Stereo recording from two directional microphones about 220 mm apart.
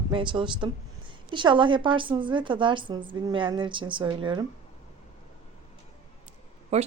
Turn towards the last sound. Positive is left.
turn(degrees=-30)  # may be behind; listen again after turning